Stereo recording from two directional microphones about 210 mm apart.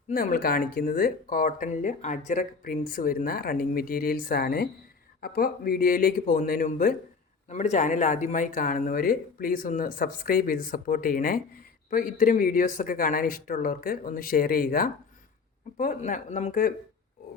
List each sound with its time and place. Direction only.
0.1 s speech: 40° left (ahead or behind)